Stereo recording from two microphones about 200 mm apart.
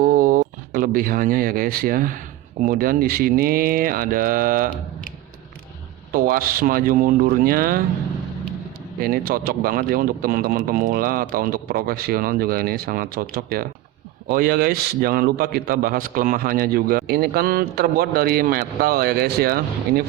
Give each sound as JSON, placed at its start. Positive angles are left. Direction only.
{"t": 0.0, "sound": "speech", "side_deg": -45}
{"t": 6.1, "sound": "a man's voice", "side_deg": -45}
{"t": 9.0, "sound": "a man's voice", "side_deg": -50}